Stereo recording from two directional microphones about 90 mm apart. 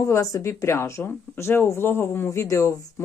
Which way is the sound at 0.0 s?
35° left (ahead or behind).